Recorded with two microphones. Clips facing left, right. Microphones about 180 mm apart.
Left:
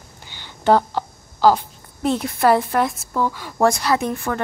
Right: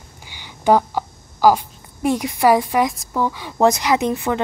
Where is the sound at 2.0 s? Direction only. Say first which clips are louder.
Right 1 dB; 10° right (ahead or behind).